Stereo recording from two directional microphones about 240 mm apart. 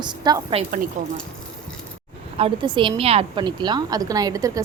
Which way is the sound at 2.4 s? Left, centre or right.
Right.